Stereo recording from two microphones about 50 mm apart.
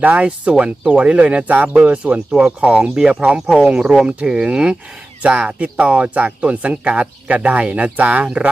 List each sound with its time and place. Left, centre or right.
0.0 s speech: right